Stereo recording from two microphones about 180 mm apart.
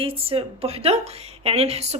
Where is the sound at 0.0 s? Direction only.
30° right (ahead or behind).